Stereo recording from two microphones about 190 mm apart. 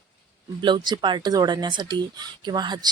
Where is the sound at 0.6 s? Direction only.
25° right (ahead or behind).